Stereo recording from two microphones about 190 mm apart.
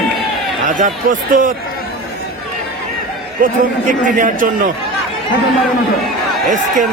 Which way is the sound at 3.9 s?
45° right (ahead or behind).